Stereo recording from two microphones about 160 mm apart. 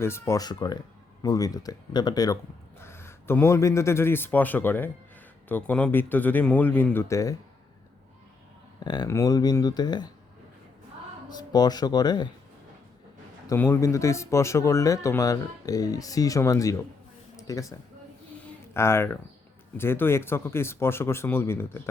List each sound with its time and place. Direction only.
0.0 s speech: 15° left (ahead or behind)
8.8 s speech: 25° left (ahead or behind)
11.3 s speech: 25° left (ahead or behind)
13.5 s speech: 15° left (ahead or behind)